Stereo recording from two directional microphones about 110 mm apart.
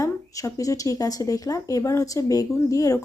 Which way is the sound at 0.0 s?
30° left (ahead or behind).